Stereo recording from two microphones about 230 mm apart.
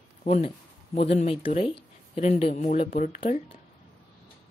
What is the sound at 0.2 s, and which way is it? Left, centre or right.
Speech, left.